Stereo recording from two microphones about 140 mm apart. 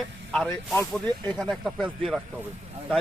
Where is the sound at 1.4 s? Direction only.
Centre (ahead or behind).